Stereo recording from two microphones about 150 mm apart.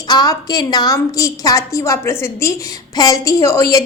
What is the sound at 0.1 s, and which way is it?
A woman's voice, 25° left (ahead or behind).